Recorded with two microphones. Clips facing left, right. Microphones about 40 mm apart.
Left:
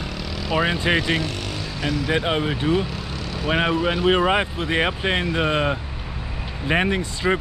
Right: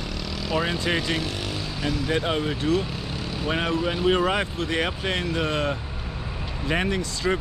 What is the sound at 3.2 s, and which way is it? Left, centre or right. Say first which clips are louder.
Vehicle: left 1 dB; centre.